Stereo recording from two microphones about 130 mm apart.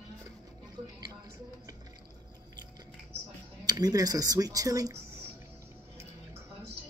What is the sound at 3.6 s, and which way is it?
Speech, 30° right (ahead or behind).